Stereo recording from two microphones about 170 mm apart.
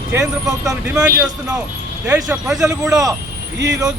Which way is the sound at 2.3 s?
5° right (ahead or behind).